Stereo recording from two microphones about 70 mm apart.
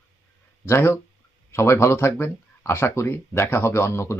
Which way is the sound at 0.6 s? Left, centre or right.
Left.